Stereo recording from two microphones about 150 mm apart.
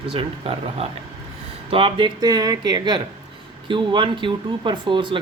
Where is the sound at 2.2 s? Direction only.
25° right (ahead or behind).